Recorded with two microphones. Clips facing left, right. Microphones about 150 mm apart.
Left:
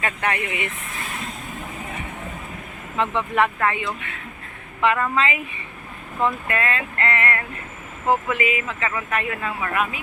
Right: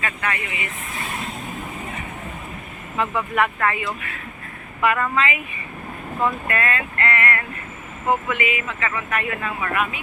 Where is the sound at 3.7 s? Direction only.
25° left (ahead or behind).